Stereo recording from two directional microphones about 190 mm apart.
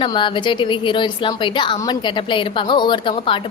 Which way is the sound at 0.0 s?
25° left (ahead or behind).